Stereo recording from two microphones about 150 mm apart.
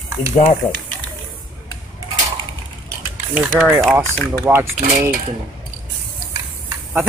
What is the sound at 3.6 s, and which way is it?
Speech, 5° right (ahead or behind).